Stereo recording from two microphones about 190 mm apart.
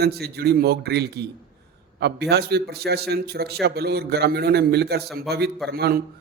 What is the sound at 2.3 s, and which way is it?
A man's voice, 60° right (ahead or behind).